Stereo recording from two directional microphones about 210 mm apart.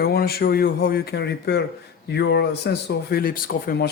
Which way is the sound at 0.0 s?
45° left (ahead or behind).